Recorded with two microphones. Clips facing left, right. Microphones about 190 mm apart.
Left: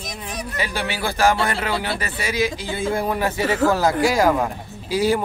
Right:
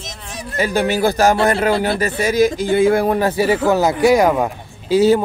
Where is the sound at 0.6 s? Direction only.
45° right (ahead or behind).